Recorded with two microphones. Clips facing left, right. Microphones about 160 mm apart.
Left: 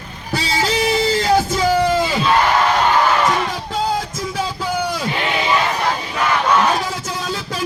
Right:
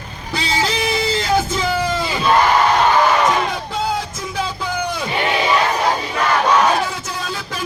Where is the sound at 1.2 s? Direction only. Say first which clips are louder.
Left 3 dB; 40° left (ahead or behind).